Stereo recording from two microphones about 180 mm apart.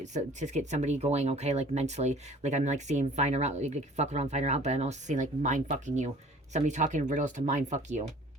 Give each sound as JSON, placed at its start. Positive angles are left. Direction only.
{"t": 0.0, "sound": "speech", "side_deg": -40}